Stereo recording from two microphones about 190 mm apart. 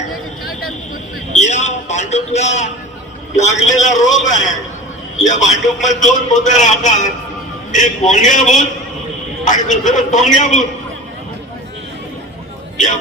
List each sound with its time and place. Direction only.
1.3 s a man's voice: 40° left (ahead or behind)